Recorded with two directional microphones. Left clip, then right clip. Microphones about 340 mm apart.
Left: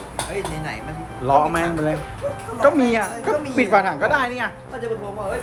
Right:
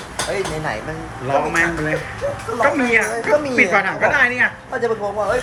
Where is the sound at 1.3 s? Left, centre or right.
Centre.